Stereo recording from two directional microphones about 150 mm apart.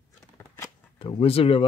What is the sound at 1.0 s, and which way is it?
Speech, 35° left (ahead or behind).